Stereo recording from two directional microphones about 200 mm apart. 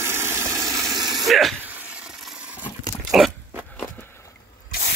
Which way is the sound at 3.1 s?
5° right (ahead or behind).